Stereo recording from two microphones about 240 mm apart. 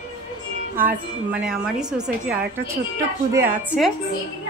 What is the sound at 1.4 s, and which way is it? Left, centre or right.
A woman's voice, centre.